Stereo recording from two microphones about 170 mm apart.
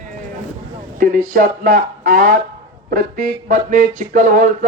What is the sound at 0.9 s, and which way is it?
A man's voice, 50° right (ahead or behind).